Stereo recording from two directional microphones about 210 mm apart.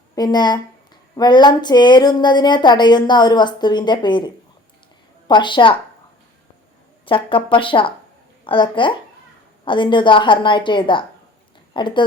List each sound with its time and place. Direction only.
0.2 s speech: 20° left (ahead or behind)
5.3 s speech: 25° left (ahead or behind)
7.0 s speech: 25° left (ahead or behind)